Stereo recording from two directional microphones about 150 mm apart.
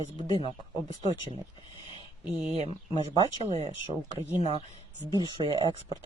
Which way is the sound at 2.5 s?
45° right (ahead or behind).